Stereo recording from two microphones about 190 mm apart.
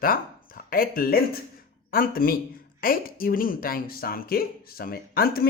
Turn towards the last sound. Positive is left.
turn(degrees=50)  # may be behind; listen again after turning